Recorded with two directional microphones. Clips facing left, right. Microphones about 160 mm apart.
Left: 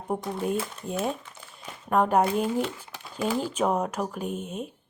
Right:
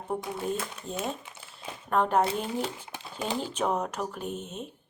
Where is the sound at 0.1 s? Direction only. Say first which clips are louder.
Left 3 dB; 10° left (ahead or behind).